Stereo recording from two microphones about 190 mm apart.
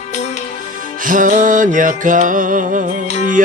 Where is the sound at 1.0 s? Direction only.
45° right (ahead or behind).